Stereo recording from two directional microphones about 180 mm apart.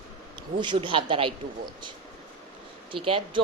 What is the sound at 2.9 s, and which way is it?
Speech, 30° right (ahead or behind).